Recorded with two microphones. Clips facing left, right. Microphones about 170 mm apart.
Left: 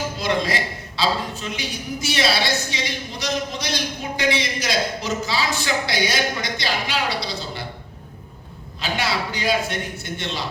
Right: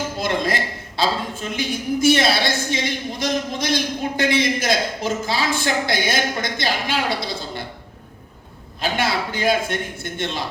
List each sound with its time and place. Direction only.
0.2 s a man's voice: 50° right (ahead or behind)
8.8 s a man's voice: 50° right (ahead or behind)